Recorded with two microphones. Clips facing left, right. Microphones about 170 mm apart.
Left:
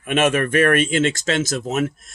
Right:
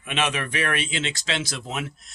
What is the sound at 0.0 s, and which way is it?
Speech, 50° left (ahead or behind).